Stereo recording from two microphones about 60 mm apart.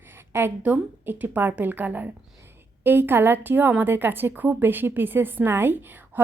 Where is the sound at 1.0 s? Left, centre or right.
Right.